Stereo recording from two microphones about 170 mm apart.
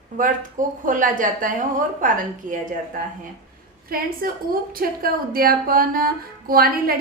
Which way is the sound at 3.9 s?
60° right (ahead or behind).